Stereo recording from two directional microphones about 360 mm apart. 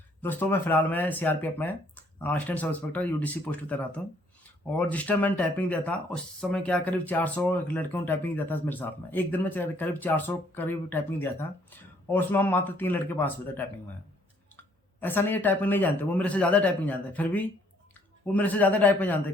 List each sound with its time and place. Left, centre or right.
0.2 s speech: centre
15.0 s speech: centre